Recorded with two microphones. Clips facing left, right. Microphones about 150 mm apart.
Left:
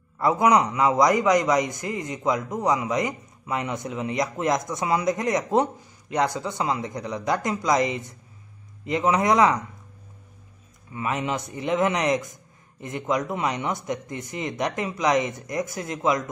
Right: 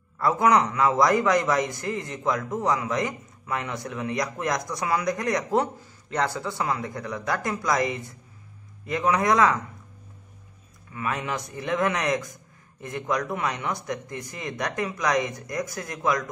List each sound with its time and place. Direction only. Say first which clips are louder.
0.2 s a man's voice: left 1 dB; 20° left (ahead or behind)
10.9 s a man's voice: left 2 dB; 20° left (ahead or behind)